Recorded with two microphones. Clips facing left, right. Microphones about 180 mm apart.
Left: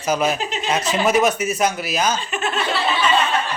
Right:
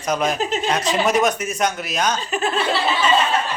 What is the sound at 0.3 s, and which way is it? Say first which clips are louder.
Speech: right 4 dB; 45° right (ahead or behind).